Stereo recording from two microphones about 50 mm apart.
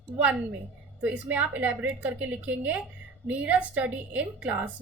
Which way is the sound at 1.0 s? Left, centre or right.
Right.